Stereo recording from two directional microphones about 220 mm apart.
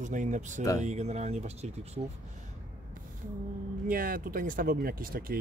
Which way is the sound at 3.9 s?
40° right (ahead or behind).